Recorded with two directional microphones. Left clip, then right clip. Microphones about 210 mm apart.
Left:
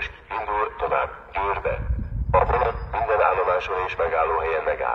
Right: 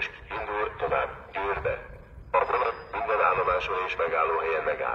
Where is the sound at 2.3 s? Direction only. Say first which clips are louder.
Left 5 dB; 20° right (ahead or behind).